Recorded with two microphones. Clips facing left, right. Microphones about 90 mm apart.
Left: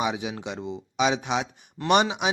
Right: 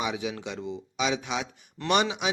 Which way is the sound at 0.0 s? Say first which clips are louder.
Left 3 dB; 25° left (ahead or behind).